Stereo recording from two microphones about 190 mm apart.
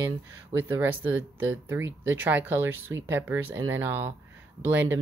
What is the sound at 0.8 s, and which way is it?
Speech, 90° right.